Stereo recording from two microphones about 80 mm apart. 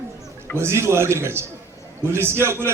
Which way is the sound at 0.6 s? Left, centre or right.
Right.